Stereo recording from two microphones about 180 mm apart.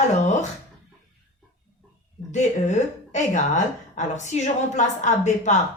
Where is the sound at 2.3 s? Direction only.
40° left (ahead or behind).